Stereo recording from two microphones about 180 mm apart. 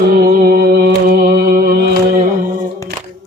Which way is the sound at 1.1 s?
60° right (ahead or behind).